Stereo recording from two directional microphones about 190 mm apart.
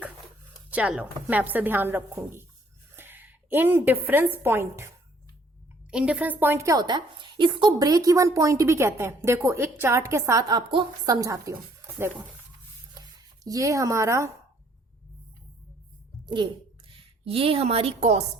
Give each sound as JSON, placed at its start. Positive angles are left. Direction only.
{"t": 0.7, "sound": "a woman's voice", "side_deg": -5}
{"t": 5.9, "sound": "a woman's voice", "side_deg": -5}
{"t": 13.4, "sound": "a woman's voice", "side_deg": -20}
{"t": 16.2, "sound": "a woman's voice", "side_deg": -25}